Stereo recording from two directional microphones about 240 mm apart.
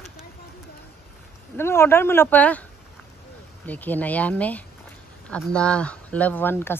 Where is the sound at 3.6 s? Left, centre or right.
Centre.